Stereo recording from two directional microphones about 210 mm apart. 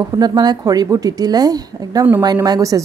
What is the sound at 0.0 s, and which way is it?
Speech, 15° right (ahead or behind).